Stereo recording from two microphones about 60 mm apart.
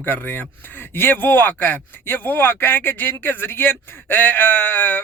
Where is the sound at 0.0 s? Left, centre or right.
Left.